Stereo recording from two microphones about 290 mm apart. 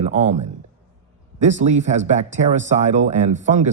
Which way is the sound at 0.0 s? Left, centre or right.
Right.